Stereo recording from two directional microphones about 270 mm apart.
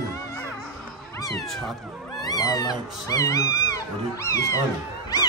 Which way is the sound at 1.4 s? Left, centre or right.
Centre.